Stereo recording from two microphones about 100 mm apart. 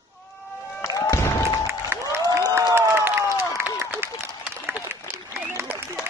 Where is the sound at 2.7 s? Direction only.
25° right (ahead or behind).